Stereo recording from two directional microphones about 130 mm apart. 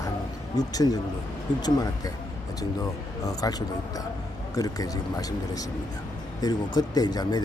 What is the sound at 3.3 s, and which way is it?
Speech, 30° left (ahead or behind).